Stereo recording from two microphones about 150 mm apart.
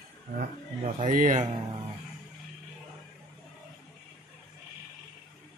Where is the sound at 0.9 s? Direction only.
60° right (ahead or behind).